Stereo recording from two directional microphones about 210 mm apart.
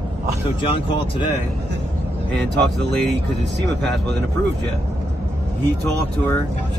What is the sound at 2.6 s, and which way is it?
Speech, 55° right (ahead or behind).